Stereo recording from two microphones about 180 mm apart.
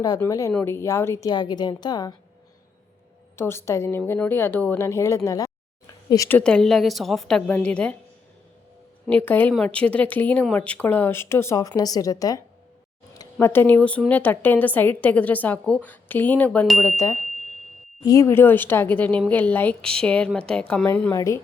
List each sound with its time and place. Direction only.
0.0 s a woman's voice: 20° left (ahead or behind)
3.3 s a woman's voice: 15° left (ahead or behind)
9.0 s a woman's voice: 10° left (ahead or behind)
18.0 s a woman's voice: 20° left (ahead or behind)